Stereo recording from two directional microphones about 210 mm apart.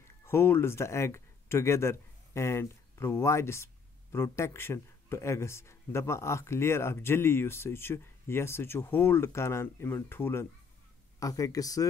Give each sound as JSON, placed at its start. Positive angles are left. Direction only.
{"t": 0.2, "sound": "speech", "side_deg": 10}